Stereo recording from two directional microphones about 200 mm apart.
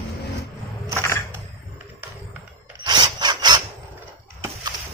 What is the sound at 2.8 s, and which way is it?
Wood, 20° right (ahead or behind).